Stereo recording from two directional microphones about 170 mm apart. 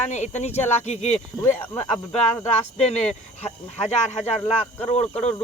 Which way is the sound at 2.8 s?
40° left (ahead or behind).